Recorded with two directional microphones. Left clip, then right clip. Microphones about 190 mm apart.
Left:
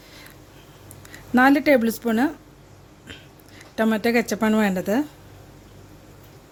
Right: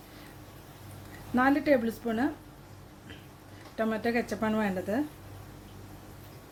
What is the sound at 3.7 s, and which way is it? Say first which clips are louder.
Speech: left 9 dB; 50° left (ahead or behind).